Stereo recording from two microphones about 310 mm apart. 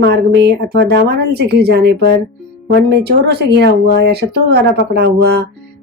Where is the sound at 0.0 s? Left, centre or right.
Right.